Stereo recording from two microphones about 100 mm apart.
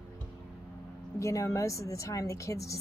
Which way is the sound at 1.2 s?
30° left (ahead or behind).